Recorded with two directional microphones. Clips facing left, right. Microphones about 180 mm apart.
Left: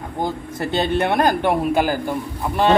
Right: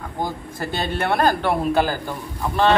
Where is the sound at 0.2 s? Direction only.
20° left (ahead or behind).